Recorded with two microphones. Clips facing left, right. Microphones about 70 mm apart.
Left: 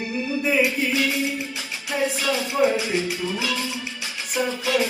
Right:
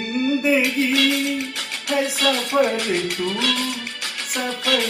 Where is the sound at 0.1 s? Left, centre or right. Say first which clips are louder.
Right 6 dB; right.